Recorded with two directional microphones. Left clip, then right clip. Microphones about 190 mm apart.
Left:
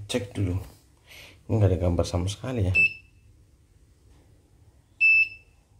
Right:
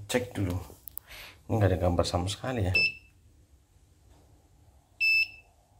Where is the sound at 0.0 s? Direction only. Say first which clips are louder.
Even; 10° left (ahead or behind).